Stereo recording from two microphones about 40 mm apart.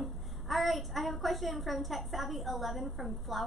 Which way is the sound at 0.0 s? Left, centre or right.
Centre.